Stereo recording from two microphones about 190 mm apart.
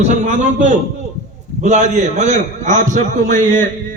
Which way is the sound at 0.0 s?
40° right (ahead or behind).